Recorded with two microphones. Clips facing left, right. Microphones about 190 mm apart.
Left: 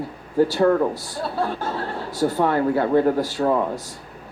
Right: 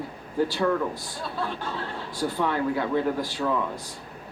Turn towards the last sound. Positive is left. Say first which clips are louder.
# left 6 dB
turn(degrees=45)  # may be behind; listen again after turning